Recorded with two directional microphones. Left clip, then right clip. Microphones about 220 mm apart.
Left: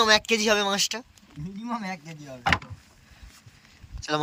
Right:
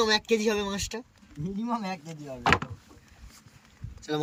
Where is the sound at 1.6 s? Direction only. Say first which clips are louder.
Even; 45° right (ahead or behind).